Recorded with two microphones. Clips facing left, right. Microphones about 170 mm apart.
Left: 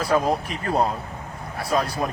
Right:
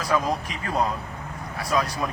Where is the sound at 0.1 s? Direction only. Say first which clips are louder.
Left 3 dB; 40° left (ahead or behind).